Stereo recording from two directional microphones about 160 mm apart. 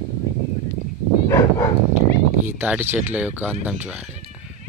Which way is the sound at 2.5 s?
10° right (ahead or behind).